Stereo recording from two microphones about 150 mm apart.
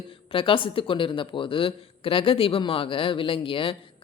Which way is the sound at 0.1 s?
35° left (ahead or behind).